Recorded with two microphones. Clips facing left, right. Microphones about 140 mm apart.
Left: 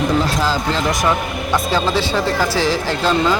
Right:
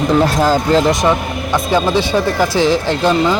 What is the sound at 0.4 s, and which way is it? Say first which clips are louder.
Speech: right 7 dB; 50° right (ahead or behind).